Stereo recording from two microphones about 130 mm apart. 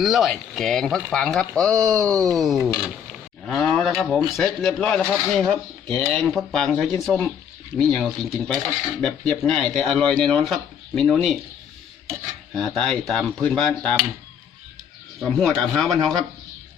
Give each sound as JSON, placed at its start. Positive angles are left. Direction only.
{"t": 0.0, "sound": "speech", "side_deg": 0}
{"t": 12.5, "sound": "speech", "side_deg": 5}
{"t": 15.2, "sound": "speech", "side_deg": 5}